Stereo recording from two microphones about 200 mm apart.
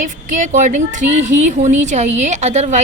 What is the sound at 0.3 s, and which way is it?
A woman's voice, 40° right (ahead or behind).